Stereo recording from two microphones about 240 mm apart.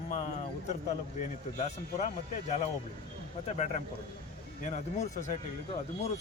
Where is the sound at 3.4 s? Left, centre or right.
Left.